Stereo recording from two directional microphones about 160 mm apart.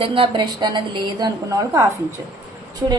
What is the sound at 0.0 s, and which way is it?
A woman's voice, 35° right (ahead or behind).